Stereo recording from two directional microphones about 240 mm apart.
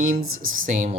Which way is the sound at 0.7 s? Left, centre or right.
Right.